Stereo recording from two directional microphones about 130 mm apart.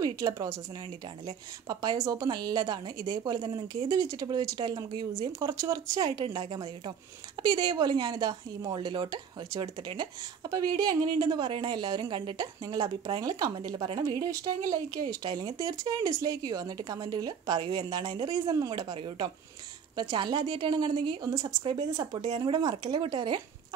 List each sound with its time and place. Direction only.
0.0 s speech: 30° right (ahead or behind)